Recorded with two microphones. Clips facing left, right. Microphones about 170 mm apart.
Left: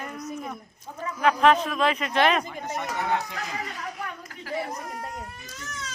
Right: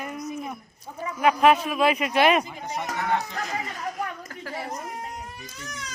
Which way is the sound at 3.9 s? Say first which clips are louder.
Right 4 dB; 45° right (ahead or behind).